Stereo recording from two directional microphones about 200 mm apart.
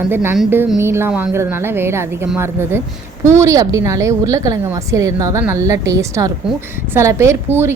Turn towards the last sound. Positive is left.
turn(degrees=-10)  # may be behind; listen again after turning